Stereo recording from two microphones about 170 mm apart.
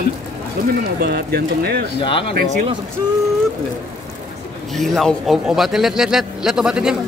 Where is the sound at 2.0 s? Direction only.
30° left (ahead or behind).